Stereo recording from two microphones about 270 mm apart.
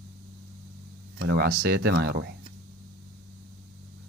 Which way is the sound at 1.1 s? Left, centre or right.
Right.